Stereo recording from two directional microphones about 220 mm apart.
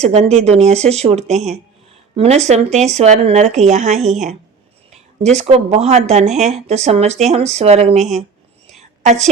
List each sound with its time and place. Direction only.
0.0 s speech: 30° right (ahead or behind)